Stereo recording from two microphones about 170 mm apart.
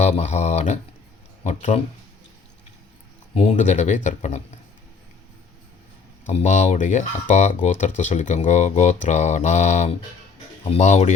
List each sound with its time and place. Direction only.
0.0 s speech: 40° left (ahead or behind)
3.3 s speech: 45° left (ahead or behind)
6.2 s speech: 45° left (ahead or behind)